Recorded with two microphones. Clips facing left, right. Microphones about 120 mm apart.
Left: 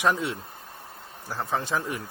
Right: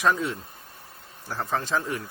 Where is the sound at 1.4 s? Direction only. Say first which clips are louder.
Right 1 dB; 15° left (ahead or behind).